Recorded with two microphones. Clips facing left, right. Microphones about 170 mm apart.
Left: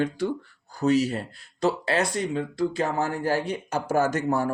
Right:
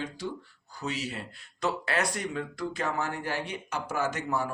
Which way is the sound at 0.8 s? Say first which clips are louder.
Left 12 dB; 40° left (ahead or behind).